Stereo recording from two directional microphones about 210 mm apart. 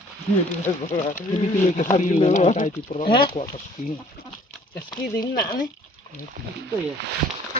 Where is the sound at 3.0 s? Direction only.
25° left (ahead or behind).